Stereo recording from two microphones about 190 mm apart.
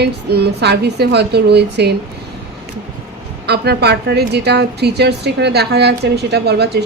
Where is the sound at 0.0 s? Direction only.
60° right (ahead or behind).